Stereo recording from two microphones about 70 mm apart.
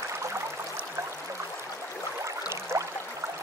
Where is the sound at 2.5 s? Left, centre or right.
Right.